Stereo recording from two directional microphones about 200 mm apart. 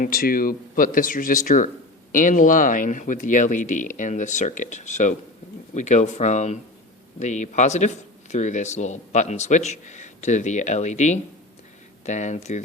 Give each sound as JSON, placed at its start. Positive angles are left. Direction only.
{"t": 0.0, "sound": "a man's voice", "side_deg": 45}